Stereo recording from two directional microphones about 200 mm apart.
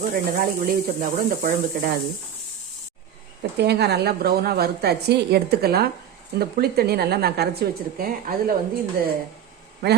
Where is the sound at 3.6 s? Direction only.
55° right (ahead or behind).